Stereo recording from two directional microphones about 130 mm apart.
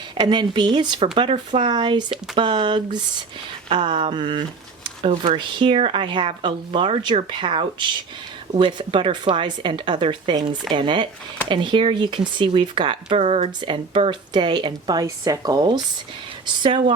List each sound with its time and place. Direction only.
0.2 s speech: 35° right (ahead or behind)
1.0 s speech: 45° right (ahead or behind)